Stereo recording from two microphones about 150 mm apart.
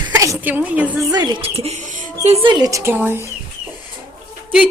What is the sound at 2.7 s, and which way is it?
Speech, 15° right (ahead or behind).